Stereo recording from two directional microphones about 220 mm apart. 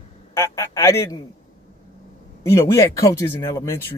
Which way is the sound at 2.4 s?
15° left (ahead or behind).